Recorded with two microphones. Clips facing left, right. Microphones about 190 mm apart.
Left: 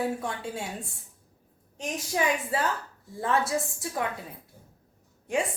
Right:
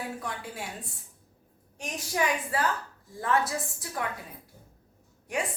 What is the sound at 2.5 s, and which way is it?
A woman's voice, 25° left (ahead or behind).